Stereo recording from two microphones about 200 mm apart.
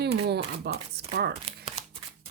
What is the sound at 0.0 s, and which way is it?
Shuffling cards, 55° right (ahead or behind).